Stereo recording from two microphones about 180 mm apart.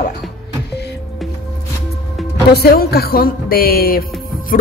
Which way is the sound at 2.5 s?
60° left (ahead or behind).